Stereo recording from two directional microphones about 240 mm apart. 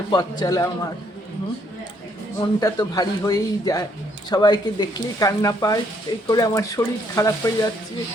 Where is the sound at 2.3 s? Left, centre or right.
Centre.